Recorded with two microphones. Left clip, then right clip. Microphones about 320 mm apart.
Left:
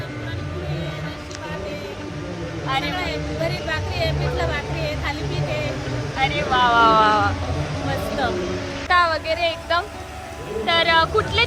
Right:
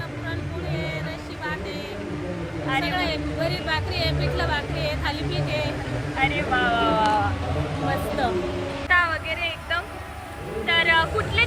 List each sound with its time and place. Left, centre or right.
2.6 s speech: centre
6.7 s speech: left
8.9 s a woman's voice: centre